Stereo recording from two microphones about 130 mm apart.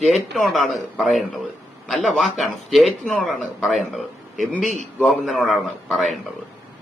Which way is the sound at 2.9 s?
10° left (ahead or behind).